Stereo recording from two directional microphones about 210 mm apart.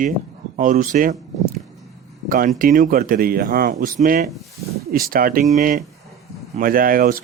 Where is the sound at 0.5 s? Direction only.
40° right (ahead or behind).